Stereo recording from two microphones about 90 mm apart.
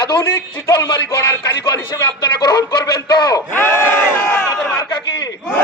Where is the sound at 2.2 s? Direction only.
55° left (ahead or behind).